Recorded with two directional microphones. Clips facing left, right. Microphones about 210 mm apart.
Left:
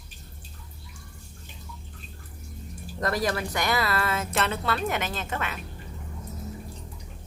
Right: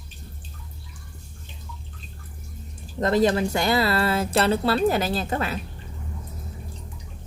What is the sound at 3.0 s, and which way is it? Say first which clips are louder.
A woman's voice: right 7 dB; 25° right (ahead or behind).